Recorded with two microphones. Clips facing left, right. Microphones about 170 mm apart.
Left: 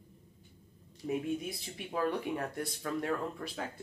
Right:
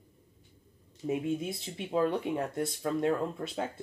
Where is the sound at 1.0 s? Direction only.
25° right (ahead or behind).